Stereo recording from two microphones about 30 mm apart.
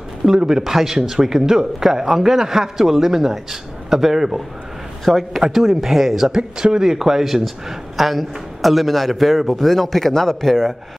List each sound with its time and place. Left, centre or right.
0.4 s a man's voice: centre
5.0 s a man's voice: centre
5.4 s a man's voice: centre
6.3 s a man's voice: right
8.0 s a man's voice: centre